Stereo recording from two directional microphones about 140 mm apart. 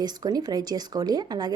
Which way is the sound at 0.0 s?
30° right (ahead or behind).